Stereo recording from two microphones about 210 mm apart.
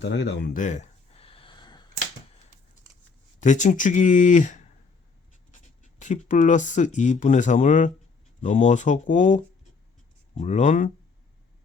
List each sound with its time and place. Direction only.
0.0 s speech: 55° left (ahead or behind)
0.5 s a sound: 35° left (ahead or behind)
3.4 s speech: 35° left (ahead or behind)